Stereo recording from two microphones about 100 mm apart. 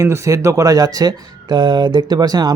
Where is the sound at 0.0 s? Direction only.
30° right (ahead or behind).